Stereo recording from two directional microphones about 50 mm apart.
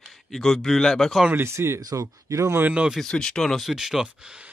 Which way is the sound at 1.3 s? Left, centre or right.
Right.